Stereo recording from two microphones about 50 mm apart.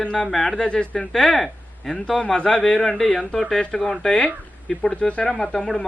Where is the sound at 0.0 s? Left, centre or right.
Centre.